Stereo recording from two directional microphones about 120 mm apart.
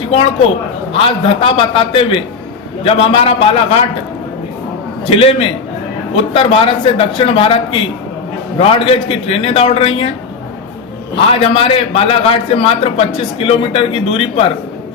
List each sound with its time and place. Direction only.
0.9 s a man's voice: 50° left (ahead or behind)
5.0 s a man's voice: 50° left (ahead or behind)
11.3 s a man's voice: 50° left (ahead or behind)